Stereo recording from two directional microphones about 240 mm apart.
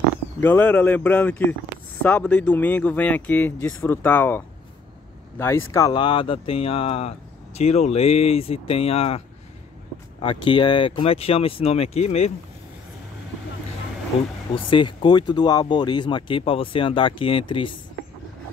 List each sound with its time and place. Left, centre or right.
0.4 s speech: centre
5.7 s speech: centre
10.2 s speech: centre
14.5 s speech: left